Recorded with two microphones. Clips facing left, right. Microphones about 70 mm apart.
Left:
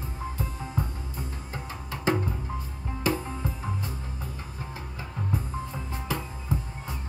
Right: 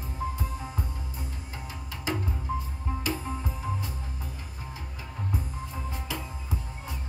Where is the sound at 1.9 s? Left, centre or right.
Left.